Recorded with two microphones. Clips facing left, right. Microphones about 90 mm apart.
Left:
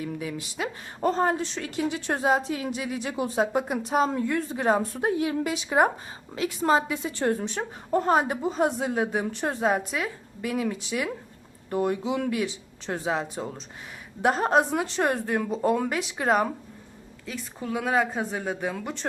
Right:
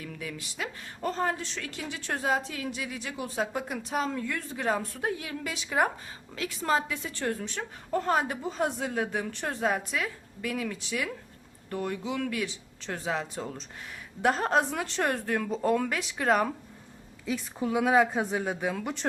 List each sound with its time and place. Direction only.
0.0 s a woman's voice: 20° left (ahead or behind)
13.3 s a woman's voice: 10° left (ahead or behind)
17.2 s a woman's voice: 10° right (ahead or behind)